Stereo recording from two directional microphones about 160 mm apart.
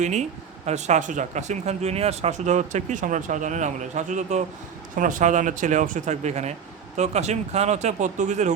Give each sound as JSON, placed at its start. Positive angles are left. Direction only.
{"t": 0.0, "sound": "speech", "side_deg": -45}